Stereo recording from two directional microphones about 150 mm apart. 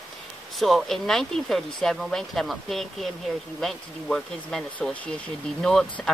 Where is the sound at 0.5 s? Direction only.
Centre (ahead or behind).